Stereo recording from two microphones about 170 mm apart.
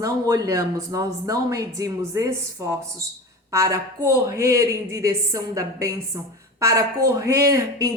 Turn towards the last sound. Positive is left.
turn(degrees=-20)  # may be behind; listen again after turning